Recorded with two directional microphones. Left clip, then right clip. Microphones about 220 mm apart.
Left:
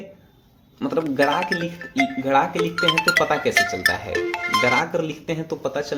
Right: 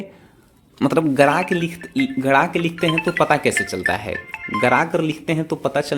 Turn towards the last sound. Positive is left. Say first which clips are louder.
# right 4 dB
turn(degrees=-35)  # may be behind; listen again after turning